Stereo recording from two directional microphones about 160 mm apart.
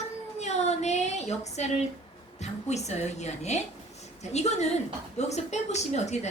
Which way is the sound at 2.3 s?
45° left (ahead or behind).